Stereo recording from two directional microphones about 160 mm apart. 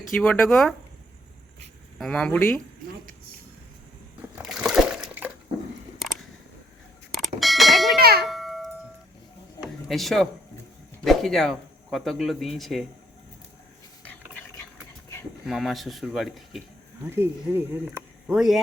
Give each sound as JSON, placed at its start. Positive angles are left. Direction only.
{"t": 0.2, "sound": "speech", "side_deg": 5}
{"t": 2.0, "sound": "speech", "side_deg": 5}
{"t": 4.4, "sound": "water", "side_deg": -5}
{"t": 7.1, "sound": "bell", "side_deg": 0}
{"t": 7.9, "sound": "a sound", "side_deg": -75}
{"t": 8.3, "sound": "music", "side_deg": 0}
{"t": 9.9, "sound": "speech", "side_deg": 0}
{"t": 15.4, "sound": "speech", "side_deg": 0}
{"t": 17.1, "sound": "speech", "side_deg": -15}
{"t": 18.3, "sound": "speech", "side_deg": 0}